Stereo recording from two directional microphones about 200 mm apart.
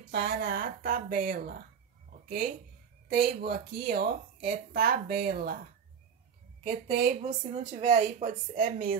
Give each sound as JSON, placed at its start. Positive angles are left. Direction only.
{"t": 0.1, "sound": "speech", "side_deg": -45}
{"t": 6.6, "sound": "speech", "side_deg": -40}
{"t": 8.5, "sound": "speech", "side_deg": -45}